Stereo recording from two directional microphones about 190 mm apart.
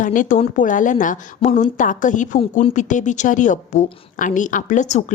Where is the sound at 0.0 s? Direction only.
45° left (ahead or behind).